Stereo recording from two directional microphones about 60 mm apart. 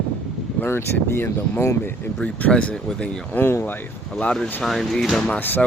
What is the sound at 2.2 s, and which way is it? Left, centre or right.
Speech, left.